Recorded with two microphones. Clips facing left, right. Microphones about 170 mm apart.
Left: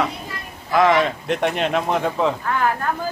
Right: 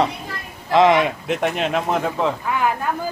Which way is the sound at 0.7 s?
15° right (ahead or behind).